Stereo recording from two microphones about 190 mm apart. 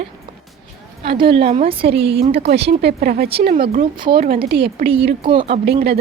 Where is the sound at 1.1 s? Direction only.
25° right (ahead or behind).